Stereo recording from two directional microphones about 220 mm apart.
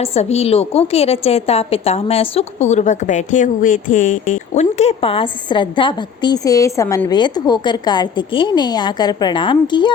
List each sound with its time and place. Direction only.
0.0 s a woman's voice: 30° left (ahead or behind)